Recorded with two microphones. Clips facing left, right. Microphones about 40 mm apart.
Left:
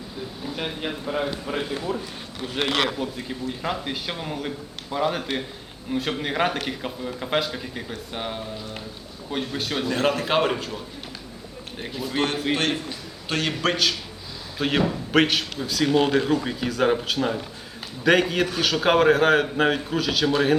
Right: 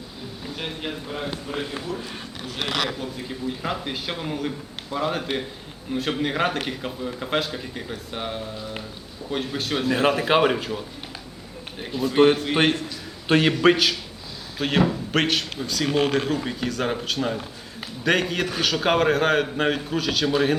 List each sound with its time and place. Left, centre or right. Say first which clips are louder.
0.4 s a man's voice: left 1 dB; centre
1.9 s a man's voice: left 1 dB; left
3.0 s a man's voice: left 1 dB; centre
11.8 s a man's voice: right 6 dB; centre
13.2 s a man's voice: right 7 dB; right
13.6 s a man's voice: right 5 dB; centre
14.6 s a man's voice: right 1 dB; centre